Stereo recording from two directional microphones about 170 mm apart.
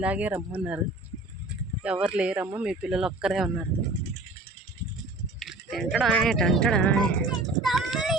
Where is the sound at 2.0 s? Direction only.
5° right (ahead or behind).